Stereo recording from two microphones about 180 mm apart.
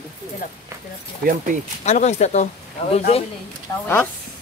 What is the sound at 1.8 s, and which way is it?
Speech, 40° left (ahead or behind).